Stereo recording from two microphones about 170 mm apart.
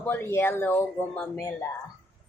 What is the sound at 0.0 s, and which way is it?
Speech, 10° left (ahead or behind).